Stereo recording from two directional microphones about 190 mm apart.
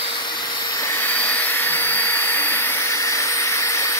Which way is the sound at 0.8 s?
10° left (ahead or behind).